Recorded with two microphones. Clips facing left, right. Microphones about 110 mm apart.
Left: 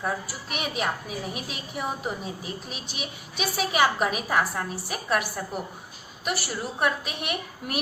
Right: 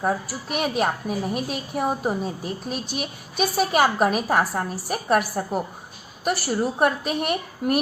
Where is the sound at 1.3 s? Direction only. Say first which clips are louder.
Right 8 dB; 45° right (ahead or behind).